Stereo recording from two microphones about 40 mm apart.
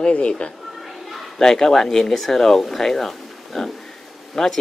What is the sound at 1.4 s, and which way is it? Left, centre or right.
Speech, centre.